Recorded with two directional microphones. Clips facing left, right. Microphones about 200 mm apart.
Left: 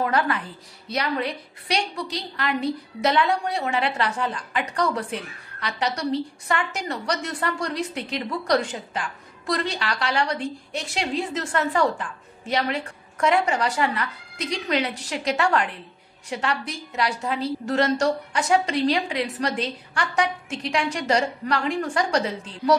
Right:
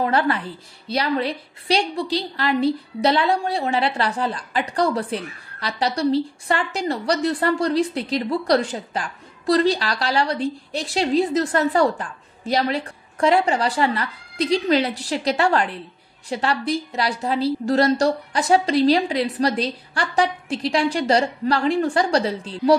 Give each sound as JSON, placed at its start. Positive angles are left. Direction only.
{"t": 0.0, "sound": "a woman's voice", "side_deg": -30}